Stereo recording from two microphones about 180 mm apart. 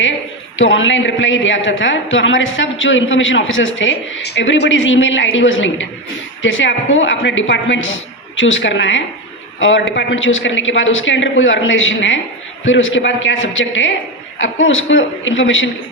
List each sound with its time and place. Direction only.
0.5 s a woman's voice: 90° left